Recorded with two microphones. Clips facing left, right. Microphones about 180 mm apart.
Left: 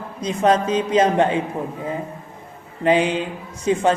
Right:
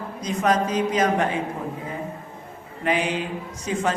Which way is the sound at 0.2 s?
30° left (ahead or behind).